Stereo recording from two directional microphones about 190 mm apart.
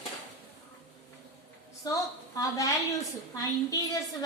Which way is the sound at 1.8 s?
15° left (ahead or behind).